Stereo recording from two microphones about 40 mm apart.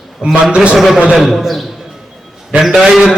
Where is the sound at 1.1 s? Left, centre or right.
Centre.